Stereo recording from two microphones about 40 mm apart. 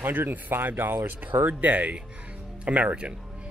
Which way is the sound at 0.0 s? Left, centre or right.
Right.